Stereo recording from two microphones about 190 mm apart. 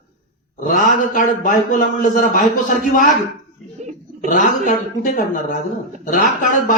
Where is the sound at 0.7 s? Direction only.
45° left (ahead or behind).